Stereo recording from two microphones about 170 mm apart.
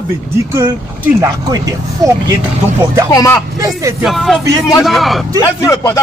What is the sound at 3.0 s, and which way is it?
Speech, 15° left (ahead or behind).